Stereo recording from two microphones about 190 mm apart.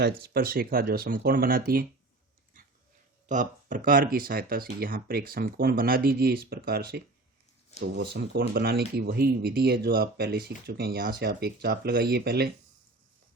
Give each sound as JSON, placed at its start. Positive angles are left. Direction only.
{"t": 0.2, "sound": "speech", "side_deg": -55}
{"t": 3.2, "sound": "speech", "side_deg": -45}